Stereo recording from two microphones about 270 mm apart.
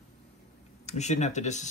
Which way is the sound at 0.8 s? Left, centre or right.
Left.